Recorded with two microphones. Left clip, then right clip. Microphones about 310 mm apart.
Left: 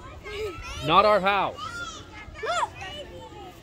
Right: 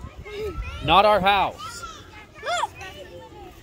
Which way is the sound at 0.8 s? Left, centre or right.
Right.